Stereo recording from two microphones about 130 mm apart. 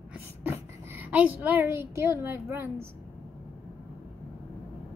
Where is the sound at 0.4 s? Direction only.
15° right (ahead or behind).